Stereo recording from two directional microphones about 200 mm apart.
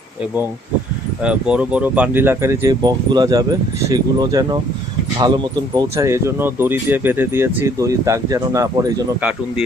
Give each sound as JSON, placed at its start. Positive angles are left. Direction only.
{"t": 1.2, "sound": "speech", "side_deg": -5}